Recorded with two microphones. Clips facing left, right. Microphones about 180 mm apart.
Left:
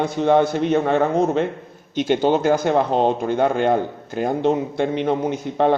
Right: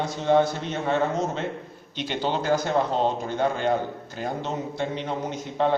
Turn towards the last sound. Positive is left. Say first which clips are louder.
# left 6 dB
turn(degrees=55)  # may be behind; listen again after turning